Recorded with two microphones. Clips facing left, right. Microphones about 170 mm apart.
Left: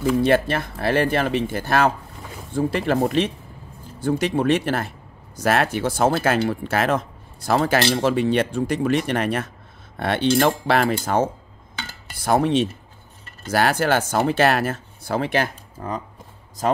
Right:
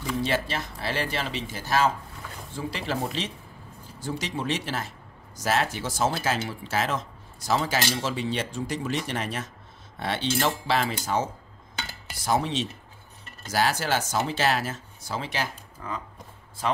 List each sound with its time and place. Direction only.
0.2 s speech: 55° left (ahead or behind)